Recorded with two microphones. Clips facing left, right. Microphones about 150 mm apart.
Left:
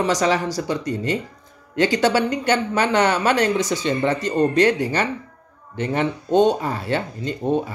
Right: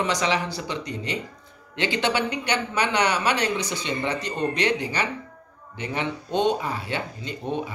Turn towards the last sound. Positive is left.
turn(degrees=45)  # may be behind; listen again after turning